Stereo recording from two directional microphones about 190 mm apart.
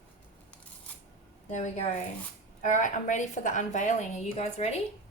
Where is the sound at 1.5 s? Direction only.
40° left (ahead or behind).